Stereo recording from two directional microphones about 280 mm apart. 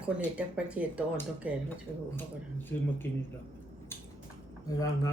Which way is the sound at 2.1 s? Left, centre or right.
Centre.